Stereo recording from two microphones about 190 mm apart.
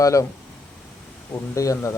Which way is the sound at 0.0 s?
15° left (ahead or behind).